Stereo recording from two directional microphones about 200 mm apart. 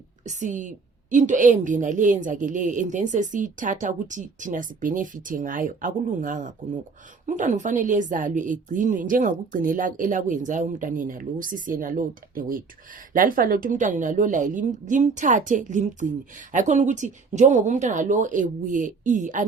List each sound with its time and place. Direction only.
0.3 s a woman's voice: 40° right (ahead or behind)